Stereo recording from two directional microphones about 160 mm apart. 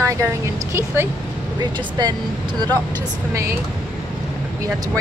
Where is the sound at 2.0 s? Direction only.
25° right (ahead or behind).